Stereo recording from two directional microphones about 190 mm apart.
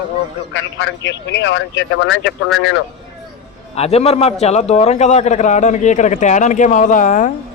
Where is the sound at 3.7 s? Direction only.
30° left (ahead or behind).